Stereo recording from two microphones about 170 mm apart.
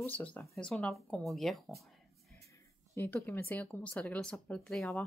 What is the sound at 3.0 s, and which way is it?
Speech, 15° left (ahead or behind).